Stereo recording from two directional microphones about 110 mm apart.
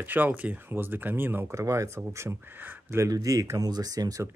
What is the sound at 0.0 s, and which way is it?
Speech, 15° right (ahead or behind).